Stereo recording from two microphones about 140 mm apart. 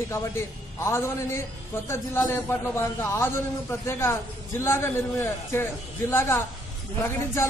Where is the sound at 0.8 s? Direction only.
20° left (ahead or behind).